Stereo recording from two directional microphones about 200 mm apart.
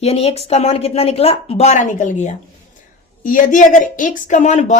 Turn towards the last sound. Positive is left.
turn(degrees=35)  # may be behind; listen again after turning